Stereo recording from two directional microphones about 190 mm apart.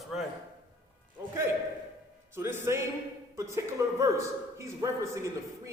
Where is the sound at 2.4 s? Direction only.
10° right (ahead or behind).